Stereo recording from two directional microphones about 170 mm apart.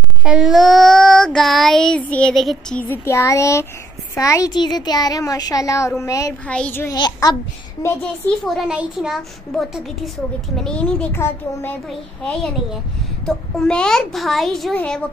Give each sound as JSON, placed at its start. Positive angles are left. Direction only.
{"t": 0.2, "sound": "child singing", "side_deg": -5}
{"t": 4.1, "sound": "a woman's voice", "side_deg": 20}
{"t": 6.4, "sound": "a child's voice", "side_deg": 5}
{"t": 7.0, "sound": "a woman's voice", "side_deg": 25}
{"t": 8.5, "sound": "child singing", "side_deg": -5}
{"t": 10.5, "sound": "a child's voice", "side_deg": 5}
{"t": 13.2, "sound": "child singing", "side_deg": 5}